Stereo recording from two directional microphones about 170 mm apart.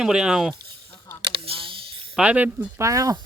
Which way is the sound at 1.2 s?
30° right (ahead or behind).